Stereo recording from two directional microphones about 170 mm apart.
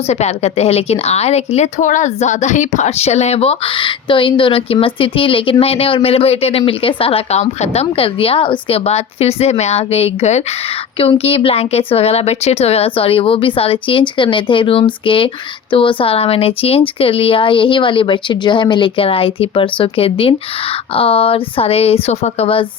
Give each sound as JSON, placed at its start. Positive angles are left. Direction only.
{"t": 0.1, "sound": "a woman's voice", "side_deg": 40}